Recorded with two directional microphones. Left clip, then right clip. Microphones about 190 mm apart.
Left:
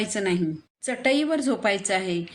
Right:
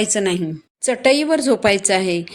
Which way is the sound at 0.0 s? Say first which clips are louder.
Right 6 dB; 40° right (ahead or behind).